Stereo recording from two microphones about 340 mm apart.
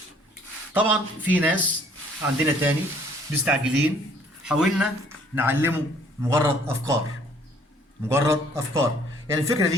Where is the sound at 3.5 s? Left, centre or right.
Centre.